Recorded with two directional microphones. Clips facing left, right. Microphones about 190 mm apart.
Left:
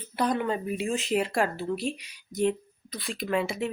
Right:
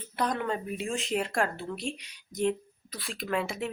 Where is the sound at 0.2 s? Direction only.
5° left (ahead or behind).